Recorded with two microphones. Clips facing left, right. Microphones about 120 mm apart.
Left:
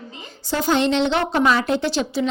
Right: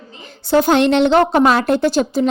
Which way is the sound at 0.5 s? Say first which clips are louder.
Right 6 dB; 65° right (ahead or behind).